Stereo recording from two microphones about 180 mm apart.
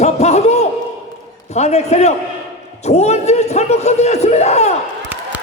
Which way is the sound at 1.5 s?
40° left (ahead or behind).